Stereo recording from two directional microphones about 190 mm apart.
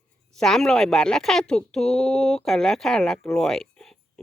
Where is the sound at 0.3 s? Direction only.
Centre (ahead or behind).